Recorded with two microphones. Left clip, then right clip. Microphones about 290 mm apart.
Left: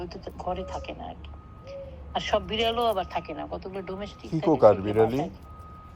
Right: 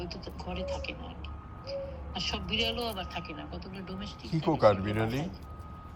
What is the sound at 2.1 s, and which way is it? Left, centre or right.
A man's voice, centre.